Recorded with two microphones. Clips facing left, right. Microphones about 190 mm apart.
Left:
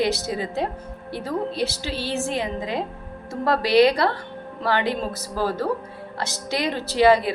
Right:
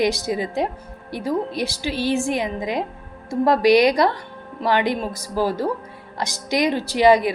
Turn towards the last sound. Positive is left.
turn(degrees=-15)  # may be behind; listen again after turning